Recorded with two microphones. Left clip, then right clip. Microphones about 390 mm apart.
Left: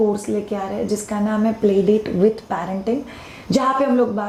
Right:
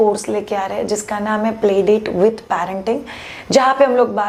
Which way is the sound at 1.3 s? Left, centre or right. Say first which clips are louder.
Right 3 dB; right.